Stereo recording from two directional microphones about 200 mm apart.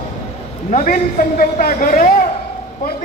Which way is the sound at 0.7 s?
40° left (ahead or behind).